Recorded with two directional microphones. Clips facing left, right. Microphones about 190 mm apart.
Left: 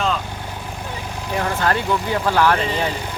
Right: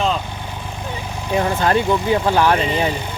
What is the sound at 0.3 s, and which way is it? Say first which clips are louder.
Vehicle: right 1 dB; 5° left (ahead or behind).